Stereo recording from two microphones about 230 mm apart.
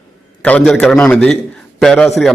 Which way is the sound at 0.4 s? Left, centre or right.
Centre.